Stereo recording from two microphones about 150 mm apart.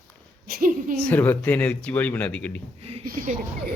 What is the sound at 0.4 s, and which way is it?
Speech, 80° right.